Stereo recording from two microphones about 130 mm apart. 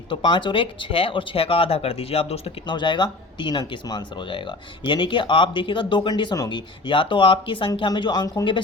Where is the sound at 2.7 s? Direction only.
35° left (ahead or behind).